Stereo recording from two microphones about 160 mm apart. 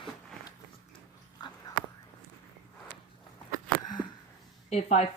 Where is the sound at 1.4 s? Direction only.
25° left (ahead or behind).